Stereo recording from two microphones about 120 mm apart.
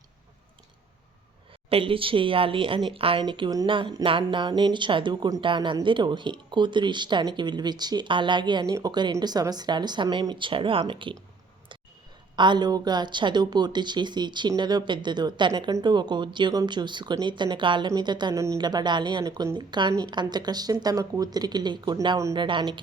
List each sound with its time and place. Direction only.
1.7 s a woman's voice: 50° right (ahead or behind)
12.4 s a woman's voice: 40° right (ahead or behind)
18.3 s a woman's voice: 30° right (ahead or behind)
19.2 s speech: 25° right (ahead or behind)
19.5 s a woman's voice: 40° right (ahead or behind)